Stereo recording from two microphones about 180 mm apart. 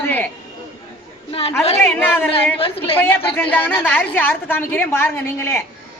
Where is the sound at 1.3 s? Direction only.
30° left (ahead or behind).